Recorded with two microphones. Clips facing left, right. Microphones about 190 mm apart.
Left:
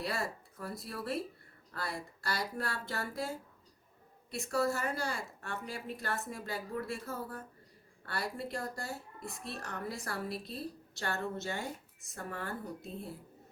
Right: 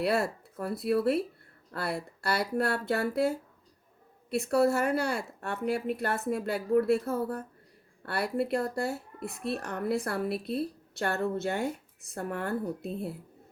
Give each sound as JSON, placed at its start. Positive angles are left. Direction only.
{"t": 0.0, "sound": "speech", "side_deg": -65}